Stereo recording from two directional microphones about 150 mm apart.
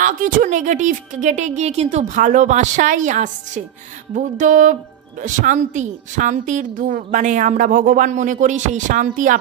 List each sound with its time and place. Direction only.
0.0 s a woman's voice: 60° right (ahead or behind)